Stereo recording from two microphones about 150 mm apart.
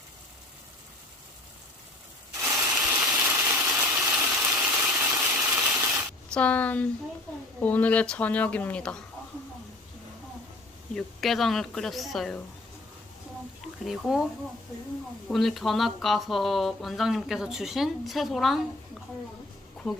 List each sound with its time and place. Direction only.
2.4 s ratchet: 20° right (ahead or behind)
3.0 s a sound: 15° right (ahead or behind)
6.3 s speech: 10° left (ahead or behind)
10.9 s speech: centre (ahead or behind)
13.8 s speech: 5° right (ahead or behind)
15.3 s speech: centre (ahead or behind)
19.9 s speech: centre (ahead or behind)